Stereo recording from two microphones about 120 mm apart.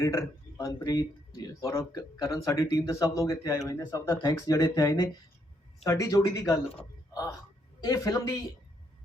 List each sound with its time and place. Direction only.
0.0 s speech: 30° left (ahead or behind)
7.9 s speech: 30° left (ahead or behind)